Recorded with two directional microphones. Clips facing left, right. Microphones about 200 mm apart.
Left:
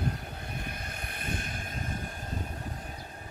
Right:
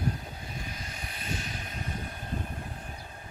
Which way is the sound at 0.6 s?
60° left (ahead or behind).